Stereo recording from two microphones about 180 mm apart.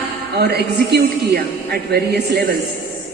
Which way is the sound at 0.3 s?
65° right (ahead or behind).